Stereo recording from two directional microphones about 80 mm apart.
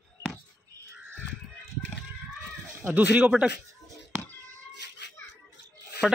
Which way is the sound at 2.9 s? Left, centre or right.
Centre.